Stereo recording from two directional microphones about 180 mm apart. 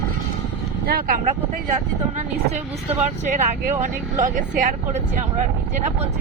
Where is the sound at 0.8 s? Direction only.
55° right (ahead or behind).